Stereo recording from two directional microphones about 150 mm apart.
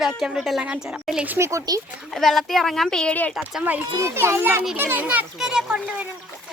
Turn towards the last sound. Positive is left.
turn(degrees=-10)  # may be behind; listen again after turning